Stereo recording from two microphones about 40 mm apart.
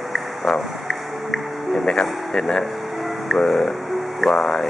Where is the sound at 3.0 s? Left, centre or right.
Centre.